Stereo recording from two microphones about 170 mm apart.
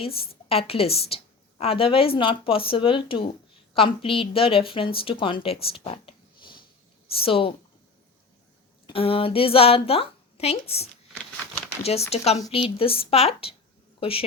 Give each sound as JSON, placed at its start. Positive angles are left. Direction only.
{"t": 0.0, "sound": "a woman's voice", "side_deg": 35}
{"t": 5.6, "sound": "whispering", "side_deg": 35}
{"t": 7.2, "sound": "a woman's voice", "side_deg": 35}
{"t": 8.9, "sound": "a woman's voice", "side_deg": 35}